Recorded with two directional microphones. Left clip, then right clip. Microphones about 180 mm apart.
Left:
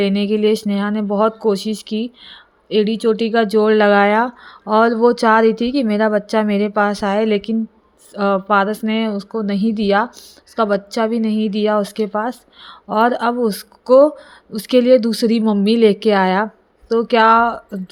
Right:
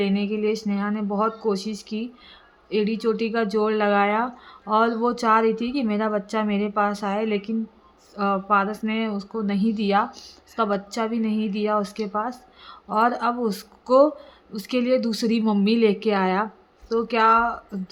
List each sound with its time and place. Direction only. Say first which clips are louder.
0.0 s speech: left 8 dB; 40° left (ahead or behind)